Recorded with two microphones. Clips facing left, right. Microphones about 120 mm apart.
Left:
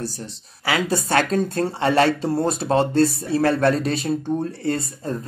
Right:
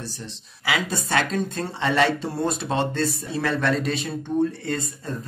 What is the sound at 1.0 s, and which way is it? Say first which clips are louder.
Speech: left 4 dB; 45° left (ahead or behind).